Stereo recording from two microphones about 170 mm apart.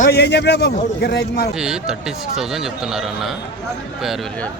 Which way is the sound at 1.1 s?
65° left (ahead or behind).